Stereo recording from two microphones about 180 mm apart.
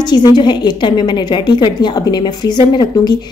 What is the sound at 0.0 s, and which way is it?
A woman's voice, 25° left (ahead or behind).